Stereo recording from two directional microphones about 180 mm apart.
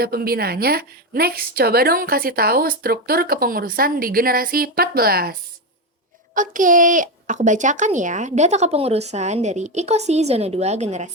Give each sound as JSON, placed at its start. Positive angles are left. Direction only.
{"t": 0.0, "sound": "a woman's voice", "side_deg": -55}